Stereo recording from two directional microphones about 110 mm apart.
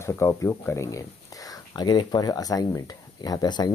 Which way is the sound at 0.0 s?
25° left (ahead or behind).